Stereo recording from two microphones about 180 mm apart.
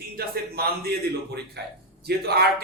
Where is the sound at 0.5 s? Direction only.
65° right (ahead or behind).